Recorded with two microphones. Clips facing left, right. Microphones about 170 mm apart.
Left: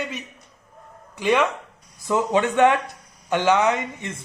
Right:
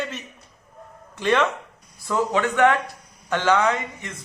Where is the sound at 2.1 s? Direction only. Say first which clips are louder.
Left 2 dB; 20° left (ahead or behind).